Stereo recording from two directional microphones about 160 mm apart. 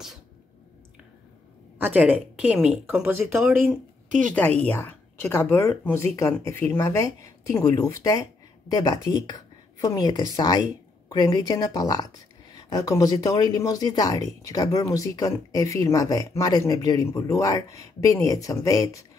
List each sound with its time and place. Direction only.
1.8 s speech: 10° right (ahead or behind)
4.6 s a woman's voice: 10° left (ahead or behind)